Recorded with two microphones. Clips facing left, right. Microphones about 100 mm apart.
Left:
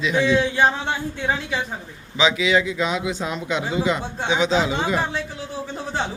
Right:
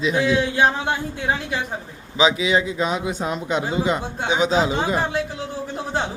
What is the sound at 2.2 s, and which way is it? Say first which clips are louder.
A man's voice: right 1 dB; 35° right (ahead or behind).